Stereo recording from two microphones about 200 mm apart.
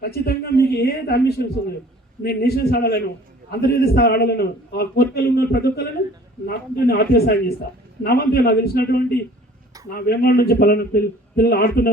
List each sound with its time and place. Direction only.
0.0 s a man's voice: 50° left (ahead or behind)